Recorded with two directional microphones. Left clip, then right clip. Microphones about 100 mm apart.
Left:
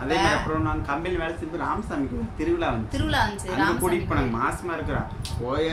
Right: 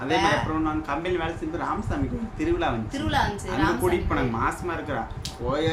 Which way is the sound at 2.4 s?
15° right (ahead or behind).